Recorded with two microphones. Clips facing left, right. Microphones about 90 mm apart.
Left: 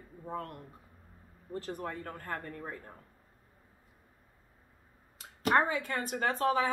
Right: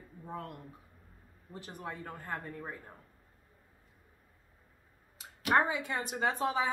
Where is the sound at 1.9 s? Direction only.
15° right (ahead or behind).